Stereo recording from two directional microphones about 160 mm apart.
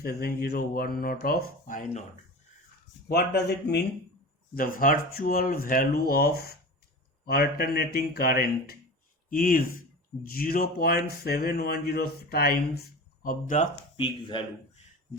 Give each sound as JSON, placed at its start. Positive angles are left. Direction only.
{"t": 0.2, "sound": "speech", "side_deg": 70}
{"t": 3.1, "sound": "speech", "side_deg": 90}
{"t": 4.5, "sound": "speech", "side_deg": 60}
{"t": 13.2, "sound": "speech", "side_deg": 55}
{"t": 13.9, "sound": "speech", "side_deg": 30}